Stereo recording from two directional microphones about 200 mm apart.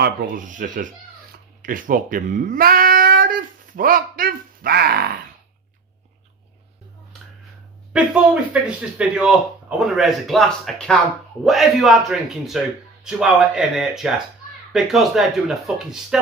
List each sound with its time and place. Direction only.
0.0 s speech: 40° right (ahead or behind)
7.9 s speech: 5° right (ahead or behind)